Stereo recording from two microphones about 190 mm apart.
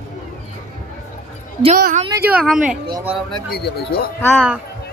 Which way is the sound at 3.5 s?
55° left (ahead or behind).